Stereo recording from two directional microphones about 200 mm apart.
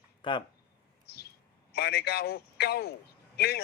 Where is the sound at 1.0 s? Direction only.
55° left (ahead or behind).